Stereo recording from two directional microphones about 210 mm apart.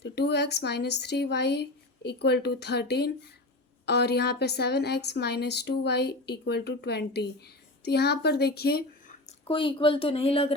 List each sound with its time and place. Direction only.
0.0 s a woman's voice: 55° left (ahead or behind)
9.5 s speech: 25° left (ahead or behind)